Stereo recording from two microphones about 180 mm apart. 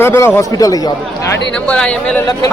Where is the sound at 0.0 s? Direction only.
10° left (ahead or behind).